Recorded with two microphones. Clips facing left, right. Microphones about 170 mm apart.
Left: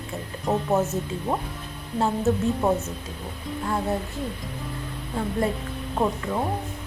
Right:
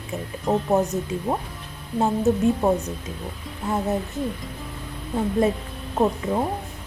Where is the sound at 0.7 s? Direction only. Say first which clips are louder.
Right 2 dB; 15° right (ahead or behind).